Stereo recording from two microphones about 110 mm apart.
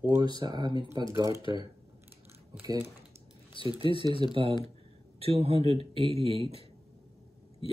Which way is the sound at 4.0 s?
50° right (ahead or behind).